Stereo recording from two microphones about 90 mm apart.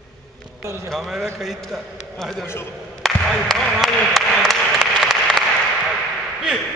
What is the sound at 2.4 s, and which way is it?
Speech, 25° left (ahead or behind).